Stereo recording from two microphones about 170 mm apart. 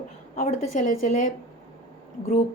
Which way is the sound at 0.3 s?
50° left (ahead or behind).